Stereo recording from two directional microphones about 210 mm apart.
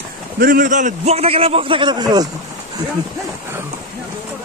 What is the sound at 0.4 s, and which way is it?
A man's voice, 40° right (ahead or behind).